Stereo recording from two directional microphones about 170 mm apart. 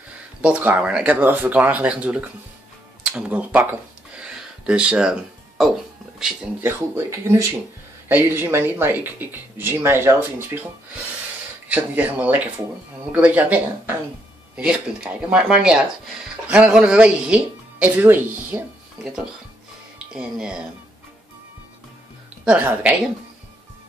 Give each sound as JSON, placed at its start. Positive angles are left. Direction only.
{"t": 0.4, "sound": "speech", "side_deg": -10}
{"t": 4.1, "sound": "a sound", "side_deg": -5}
{"t": 6.1, "sound": "speech", "side_deg": -5}
{"t": 7.1, "sound": "speech", "side_deg": -20}
{"t": 11.7, "sound": "speech", "side_deg": -10}
{"t": 20.1, "sound": "speech", "side_deg": -5}
{"t": 22.4, "sound": "speech", "side_deg": -5}